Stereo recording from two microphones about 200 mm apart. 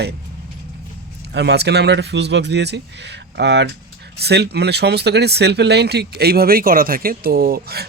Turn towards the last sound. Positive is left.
turn(degrees=-50)  # may be behind; listen again after turning